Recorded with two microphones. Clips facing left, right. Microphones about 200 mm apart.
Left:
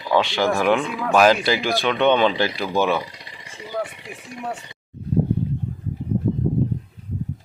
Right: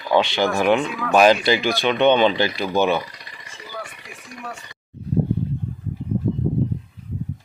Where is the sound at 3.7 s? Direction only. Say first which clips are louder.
Left 8 dB; 25° left (ahead or behind).